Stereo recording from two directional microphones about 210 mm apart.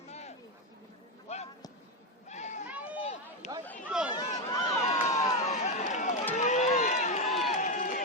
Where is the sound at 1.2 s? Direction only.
30° left (ahead or behind).